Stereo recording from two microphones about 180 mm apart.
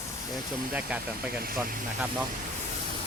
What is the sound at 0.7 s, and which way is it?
Speech, 5° right (ahead or behind).